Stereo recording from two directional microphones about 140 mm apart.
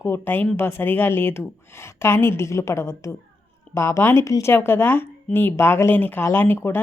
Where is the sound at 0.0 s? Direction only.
15° left (ahead or behind).